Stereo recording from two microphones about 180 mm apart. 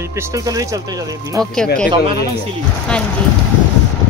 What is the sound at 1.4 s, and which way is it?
Music, 20° right (ahead or behind).